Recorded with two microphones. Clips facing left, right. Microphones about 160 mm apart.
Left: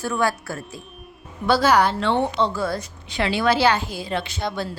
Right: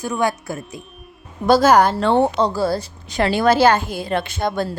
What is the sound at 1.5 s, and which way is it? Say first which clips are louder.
A woman's voice: right 5 dB; 45° right (ahead or behind).